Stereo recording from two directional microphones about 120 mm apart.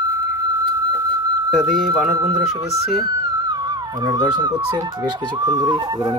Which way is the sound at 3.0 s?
35° right (ahead or behind).